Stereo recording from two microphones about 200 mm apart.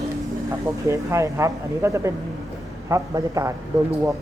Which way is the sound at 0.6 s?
15° right (ahead or behind).